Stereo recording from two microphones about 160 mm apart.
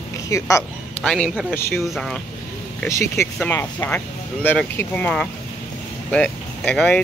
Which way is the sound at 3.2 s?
15° left (ahead or behind).